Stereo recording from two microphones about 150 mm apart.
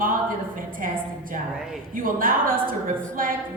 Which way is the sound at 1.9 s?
65° right (ahead or behind).